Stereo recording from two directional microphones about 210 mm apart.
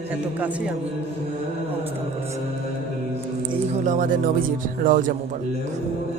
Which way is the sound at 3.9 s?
40° right (ahead or behind).